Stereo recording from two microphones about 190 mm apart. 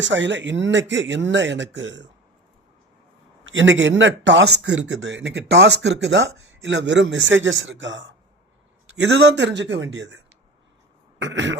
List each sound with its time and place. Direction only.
0.0 s speech: 70° right (ahead or behind)
3.4 s speech: 80° right